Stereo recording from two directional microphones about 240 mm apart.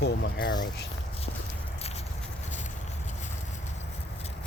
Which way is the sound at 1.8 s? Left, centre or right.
Left.